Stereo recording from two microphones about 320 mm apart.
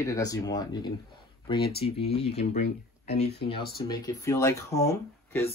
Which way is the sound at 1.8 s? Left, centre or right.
Centre.